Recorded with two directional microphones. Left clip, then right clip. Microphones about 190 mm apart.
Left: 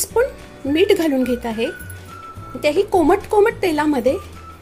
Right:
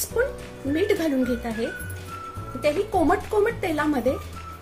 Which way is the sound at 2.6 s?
45° left (ahead or behind).